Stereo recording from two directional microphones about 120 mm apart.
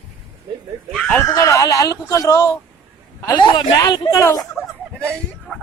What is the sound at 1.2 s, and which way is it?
Speech, 25° left (ahead or behind).